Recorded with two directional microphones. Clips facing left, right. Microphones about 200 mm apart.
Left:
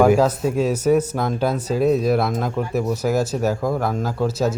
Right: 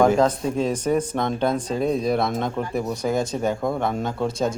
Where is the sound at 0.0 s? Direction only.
10° left (ahead or behind).